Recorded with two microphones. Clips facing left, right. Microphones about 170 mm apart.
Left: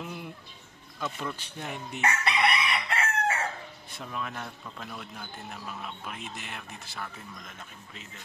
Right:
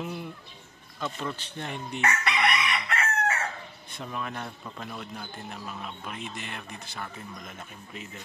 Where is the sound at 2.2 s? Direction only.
30° left (ahead or behind).